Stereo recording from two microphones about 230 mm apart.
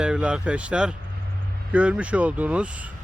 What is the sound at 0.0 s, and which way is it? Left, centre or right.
Speech, centre.